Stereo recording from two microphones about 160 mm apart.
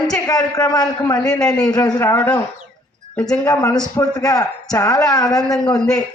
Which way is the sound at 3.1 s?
5° left (ahead or behind).